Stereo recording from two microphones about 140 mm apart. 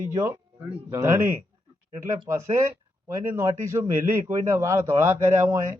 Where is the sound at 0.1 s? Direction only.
20° right (ahead or behind).